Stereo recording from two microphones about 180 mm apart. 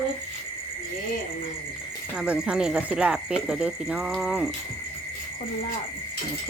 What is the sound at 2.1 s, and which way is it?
Speech, 5° right (ahead or behind).